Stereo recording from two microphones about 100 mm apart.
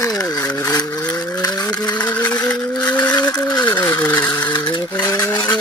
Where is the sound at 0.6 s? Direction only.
40° left (ahead or behind).